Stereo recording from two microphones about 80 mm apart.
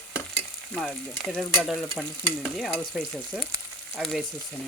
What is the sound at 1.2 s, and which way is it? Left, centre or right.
Frying, centre.